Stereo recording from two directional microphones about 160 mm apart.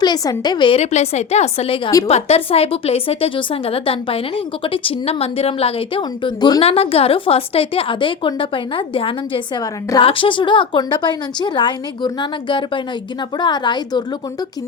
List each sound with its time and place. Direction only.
0.0 s a woman's voice: 25° left (ahead or behind)